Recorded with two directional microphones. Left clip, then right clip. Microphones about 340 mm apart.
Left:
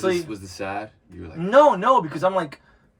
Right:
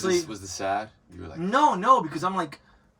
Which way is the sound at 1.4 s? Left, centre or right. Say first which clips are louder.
Left 6 dB; centre.